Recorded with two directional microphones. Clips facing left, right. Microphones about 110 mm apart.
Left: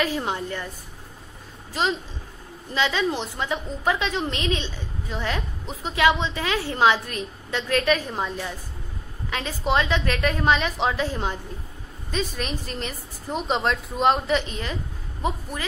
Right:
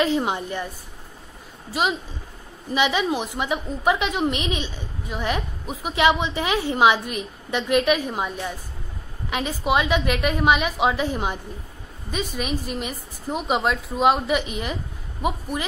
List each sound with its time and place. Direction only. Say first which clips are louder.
0.0 s a woman's voice: right 4 dB; 20° right (ahead or behind)
1.7 s a woman's voice: right 1 dB; 10° right (ahead or behind)